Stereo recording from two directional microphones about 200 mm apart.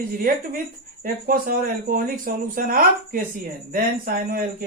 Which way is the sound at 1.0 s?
45° right (ahead or behind).